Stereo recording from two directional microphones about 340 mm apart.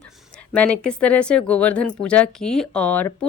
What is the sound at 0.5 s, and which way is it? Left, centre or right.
Speech, centre.